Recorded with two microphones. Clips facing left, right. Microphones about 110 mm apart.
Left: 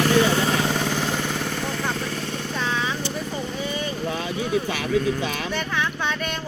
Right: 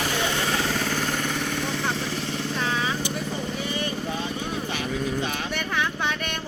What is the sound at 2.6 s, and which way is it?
Vehicle, 15° right (ahead or behind).